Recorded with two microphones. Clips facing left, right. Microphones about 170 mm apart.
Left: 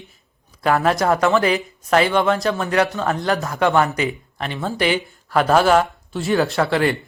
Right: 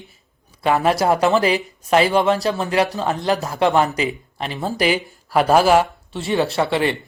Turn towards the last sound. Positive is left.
turn(degrees=0)  # may be behind; listen again after turning